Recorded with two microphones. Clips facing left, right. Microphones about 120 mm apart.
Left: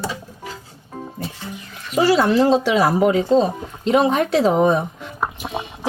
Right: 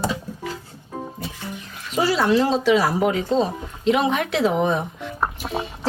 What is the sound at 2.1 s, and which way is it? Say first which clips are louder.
Speech: left 2 dB; 45° left (ahead or behind).